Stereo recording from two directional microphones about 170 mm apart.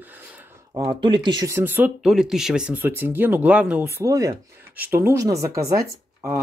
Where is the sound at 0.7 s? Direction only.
30° right (ahead or behind).